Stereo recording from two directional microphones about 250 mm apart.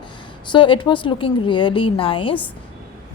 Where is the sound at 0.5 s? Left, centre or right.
Centre.